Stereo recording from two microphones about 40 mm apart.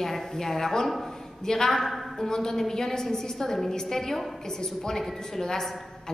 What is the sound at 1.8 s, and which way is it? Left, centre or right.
Speech, centre.